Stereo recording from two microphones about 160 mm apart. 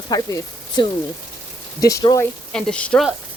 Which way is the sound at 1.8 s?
20° left (ahead or behind).